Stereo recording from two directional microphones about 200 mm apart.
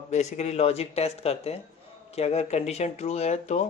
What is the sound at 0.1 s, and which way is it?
Speech, 35° left (ahead or behind).